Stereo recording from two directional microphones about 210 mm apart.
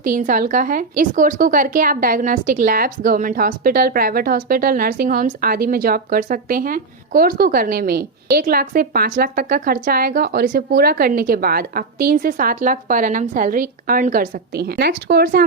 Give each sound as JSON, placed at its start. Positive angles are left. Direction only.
{"t": 0.0, "sound": "a woman's voice", "side_deg": -40}